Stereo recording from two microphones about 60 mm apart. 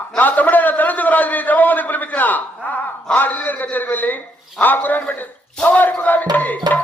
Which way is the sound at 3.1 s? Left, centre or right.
Left.